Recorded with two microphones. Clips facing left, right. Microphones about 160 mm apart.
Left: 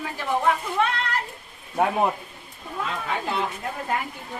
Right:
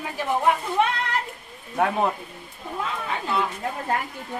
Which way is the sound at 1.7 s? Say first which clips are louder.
Left 1 dB; 15° left (ahead or behind).